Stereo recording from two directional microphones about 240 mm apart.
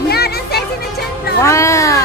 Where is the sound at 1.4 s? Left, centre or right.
Centre.